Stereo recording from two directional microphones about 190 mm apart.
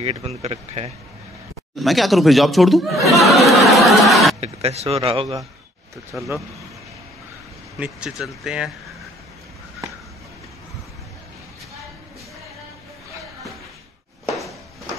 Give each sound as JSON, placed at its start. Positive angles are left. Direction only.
{"t": 0.0, "sound": "speech", "side_deg": -30}
{"t": 1.8, "sound": "speech", "side_deg": 0}
{"t": 4.4, "sound": "speech", "side_deg": -35}
{"t": 6.1, "sound": "speech", "side_deg": -5}
{"t": 7.8, "sound": "speech", "side_deg": -5}